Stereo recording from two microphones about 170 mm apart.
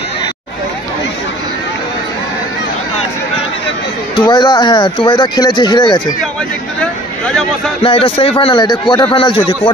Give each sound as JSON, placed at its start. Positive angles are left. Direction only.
{"t": 4.2, "sound": "speech", "side_deg": 25}
{"t": 6.8, "sound": "speech", "side_deg": 5}
{"t": 7.8, "sound": "a man's voice", "side_deg": 35}